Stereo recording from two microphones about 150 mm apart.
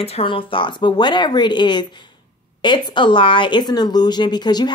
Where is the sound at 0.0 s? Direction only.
40° left (ahead or behind).